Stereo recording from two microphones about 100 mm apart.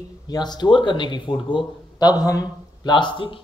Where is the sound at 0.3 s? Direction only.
45° left (ahead or behind).